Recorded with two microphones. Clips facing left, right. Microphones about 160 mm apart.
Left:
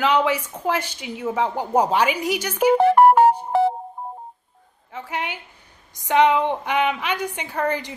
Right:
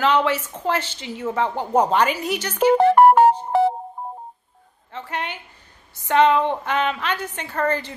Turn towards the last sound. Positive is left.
turn(degrees=15)  # may be behind; listen again after turning